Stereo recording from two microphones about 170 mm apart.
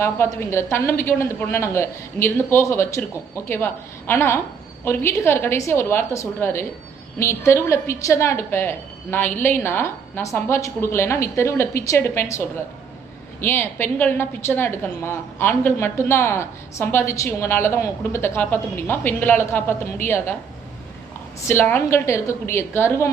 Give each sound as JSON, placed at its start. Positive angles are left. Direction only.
{"t": 0.0, "sound": "a woman's voice", "side_deg": 15}
{"t": 21.4, "sound": "a woman's voice", "side_deg": 10}